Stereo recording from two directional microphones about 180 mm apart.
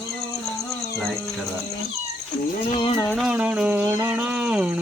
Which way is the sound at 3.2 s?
5° right (ahead or behind).